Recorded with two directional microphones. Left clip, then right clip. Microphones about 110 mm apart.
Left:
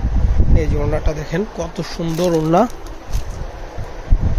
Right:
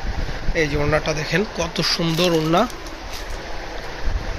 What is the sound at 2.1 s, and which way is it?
Speech, 45° left (ahead or behind).